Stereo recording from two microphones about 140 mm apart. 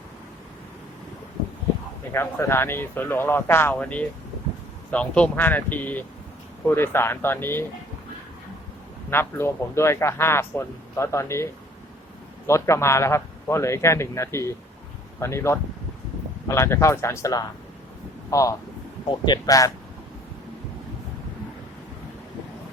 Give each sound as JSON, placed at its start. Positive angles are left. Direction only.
{"t": 2.1, "sound": "speech", "side_deg": 20}
{"t": 9.0, "sound": "speech", "side_deg": 15}
{"t": 12.5, "sound": "speech", "side_deg": 20}